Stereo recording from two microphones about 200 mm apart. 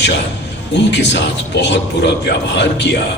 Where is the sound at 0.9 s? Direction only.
60° left (ahead or behind).